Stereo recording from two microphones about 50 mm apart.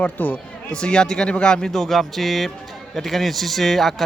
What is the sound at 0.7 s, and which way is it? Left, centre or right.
A man's voice, centre.